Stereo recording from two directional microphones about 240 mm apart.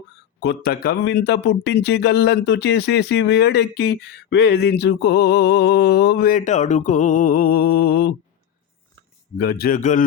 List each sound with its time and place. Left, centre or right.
0.4 s speech: left
9.4 s a man's voice: left